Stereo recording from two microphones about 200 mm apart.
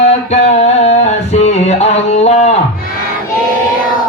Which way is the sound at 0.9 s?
35° left (ahead or behind).